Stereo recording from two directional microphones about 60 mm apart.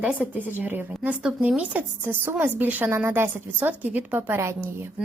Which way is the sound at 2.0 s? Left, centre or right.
Right.